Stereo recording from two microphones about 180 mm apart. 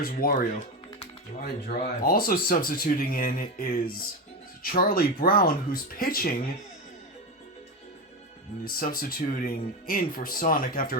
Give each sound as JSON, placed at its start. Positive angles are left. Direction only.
{"t": 0.0, "sound": "speech", "side_deg": 55}
{"t": 8.6, "sound": "speech", "side_deg": 55}